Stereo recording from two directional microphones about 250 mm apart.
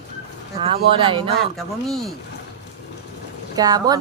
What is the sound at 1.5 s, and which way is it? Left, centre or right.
Speech, centre.